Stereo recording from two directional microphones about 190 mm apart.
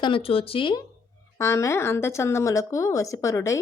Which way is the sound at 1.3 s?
15° left (ahead or behind).